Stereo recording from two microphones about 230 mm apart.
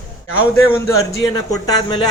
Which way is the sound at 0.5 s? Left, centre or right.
Centre.